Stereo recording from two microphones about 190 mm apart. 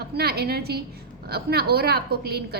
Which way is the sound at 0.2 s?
55° right (ahead or behind).